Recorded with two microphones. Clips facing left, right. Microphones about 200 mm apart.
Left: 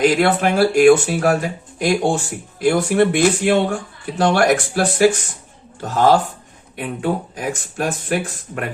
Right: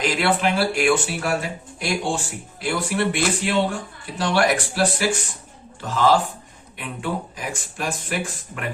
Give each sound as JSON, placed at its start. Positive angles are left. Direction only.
{"t": 0.2, "sound": "speech", "side_deg": 50}